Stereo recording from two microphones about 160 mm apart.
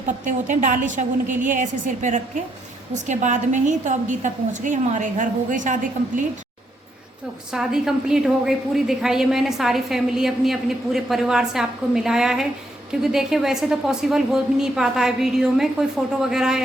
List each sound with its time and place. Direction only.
0.3 s a woman's voice: 50° right (ahead or behind)
7.5 s a woman's voice: 5° right (ahead or behind)